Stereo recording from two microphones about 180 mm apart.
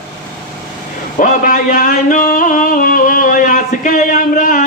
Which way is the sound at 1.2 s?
45° left (ahead or behind).